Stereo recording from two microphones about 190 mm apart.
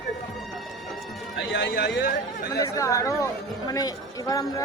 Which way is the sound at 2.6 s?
15° left (ahead or behind).